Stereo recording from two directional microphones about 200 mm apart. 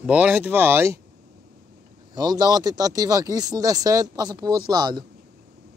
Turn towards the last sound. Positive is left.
turn(degrees=-20)  # may be behind; listen again after turning